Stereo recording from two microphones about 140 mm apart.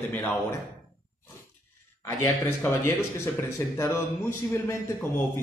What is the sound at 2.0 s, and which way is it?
A man's voice, 20° left (ahead or behind).